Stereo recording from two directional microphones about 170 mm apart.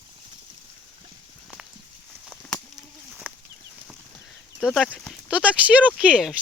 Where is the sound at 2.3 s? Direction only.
5° left (ahead or behind).